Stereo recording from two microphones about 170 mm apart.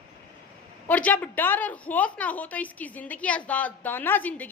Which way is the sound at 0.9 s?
10° left (ahead or behind).